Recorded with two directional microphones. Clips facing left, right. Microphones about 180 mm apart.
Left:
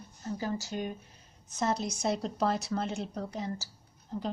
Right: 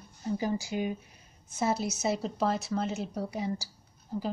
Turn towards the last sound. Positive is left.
turn(degrees=-10)  # may be behind; listen again after turning